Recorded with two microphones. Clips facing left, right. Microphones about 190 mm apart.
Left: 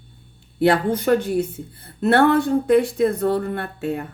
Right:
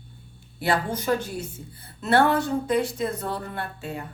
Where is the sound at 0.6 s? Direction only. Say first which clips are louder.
Left 8 dB; 60° left (ahead or behind).